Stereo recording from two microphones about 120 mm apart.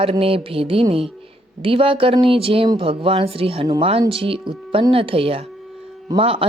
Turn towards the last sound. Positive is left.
turn(degrees=-50)  # may be behind; listen again after turning